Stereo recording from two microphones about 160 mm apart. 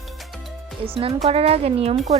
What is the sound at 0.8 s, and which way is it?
Speech, 35° right (ahead or behind).